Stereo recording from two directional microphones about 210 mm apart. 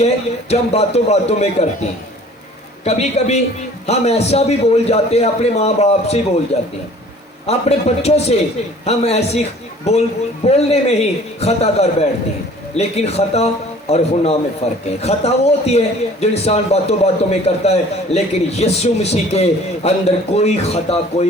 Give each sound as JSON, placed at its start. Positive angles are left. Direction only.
{"t": 0.0, "sound": "a man's voice", "side_deg": 30}
{"t": 2.8, "sound": "a man's voice", "side_deg": 30}